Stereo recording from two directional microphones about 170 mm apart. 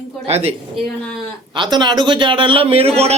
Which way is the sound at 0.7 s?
5° left (ahead or behind).